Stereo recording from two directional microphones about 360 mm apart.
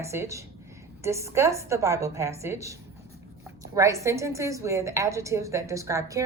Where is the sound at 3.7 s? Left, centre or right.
Centre.